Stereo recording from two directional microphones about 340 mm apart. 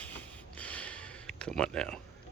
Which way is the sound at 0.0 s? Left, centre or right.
Centre.